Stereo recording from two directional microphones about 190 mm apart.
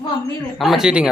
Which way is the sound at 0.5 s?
Centre (ahead or behind).